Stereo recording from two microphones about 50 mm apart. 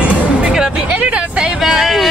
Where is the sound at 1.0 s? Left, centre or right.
Right.